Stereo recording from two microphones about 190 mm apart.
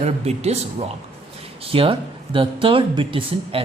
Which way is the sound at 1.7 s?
30° right (ahead or behind).